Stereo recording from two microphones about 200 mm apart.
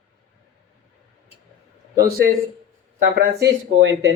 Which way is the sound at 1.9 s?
45° right (ahead or behind).